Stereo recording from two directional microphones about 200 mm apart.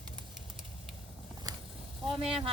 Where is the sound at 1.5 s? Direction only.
20° right (ahead or behind).